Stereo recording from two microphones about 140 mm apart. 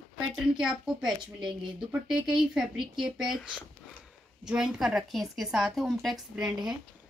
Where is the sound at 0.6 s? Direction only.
5° right (ahead or behind).